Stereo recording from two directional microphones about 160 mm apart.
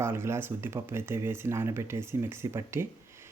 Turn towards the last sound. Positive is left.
turn(degrees=-15)  # may be behind; listen again after turning